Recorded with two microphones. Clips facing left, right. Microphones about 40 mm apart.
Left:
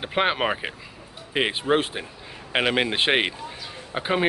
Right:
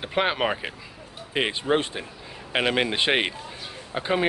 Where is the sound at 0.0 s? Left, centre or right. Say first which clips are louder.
Left 1 dB; centre.